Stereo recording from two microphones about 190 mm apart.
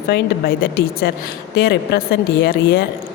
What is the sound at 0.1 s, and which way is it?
Speech, 55° left (ahead or behind).